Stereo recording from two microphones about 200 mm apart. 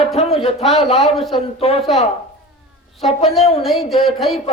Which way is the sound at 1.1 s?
Centre (ahead or behind).